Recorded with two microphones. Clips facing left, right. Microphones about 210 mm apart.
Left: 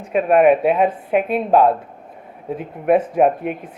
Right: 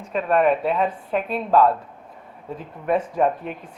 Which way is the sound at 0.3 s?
60° left (ahead or behind).